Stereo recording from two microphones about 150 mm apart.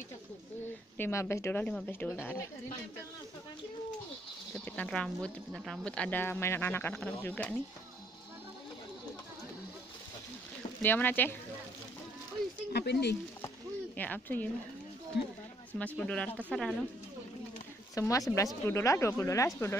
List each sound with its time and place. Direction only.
0.9 s speech: 15° left (ahead or behind)
4.6 s speech: 10° left (ahead or behind)
10.8 s speech: 10° left (ahead or behind)
12.7 s speech: 90° left
13.9 s speech: 10° left (ahead or behind)
16.0 s speech: 10° left (ahead or behind)
17.9 s speech: 20° left (ahead or behind)